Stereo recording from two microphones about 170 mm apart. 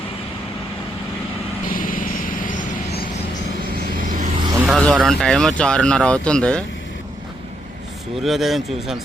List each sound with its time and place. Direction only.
1.6 s vehicle: 55° left (ahead or behind)
4.0 s vehicle: 55° right (ahead or behind)
4.6 s vehicle: centre (ahead or behind)
4.9 s speech: 5° left (ahead or behind)
8.2 s speech: centre (ahead or behind)